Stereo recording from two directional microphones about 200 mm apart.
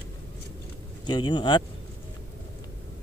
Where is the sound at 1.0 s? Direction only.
25° left (ahead or behind).